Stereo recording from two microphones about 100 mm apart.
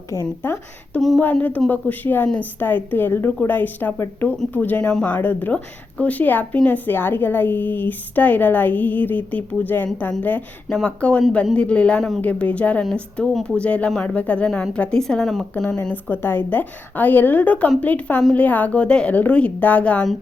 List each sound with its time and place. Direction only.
0.1 s speech: 25° left (ahead or behind)
1.2 s a woman's voice: 15° left (ahead or behind)